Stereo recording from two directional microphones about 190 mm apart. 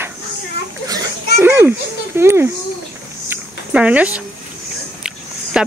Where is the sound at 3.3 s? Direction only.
5° right (ahead or behind).